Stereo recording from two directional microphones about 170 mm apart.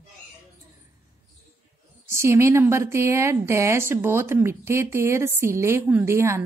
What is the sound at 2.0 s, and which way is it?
A woman's voice, 15° right (ahead or behind).